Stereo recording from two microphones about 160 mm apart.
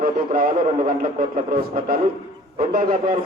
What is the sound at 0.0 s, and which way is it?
A man's voice, 65° right (ahead or behind).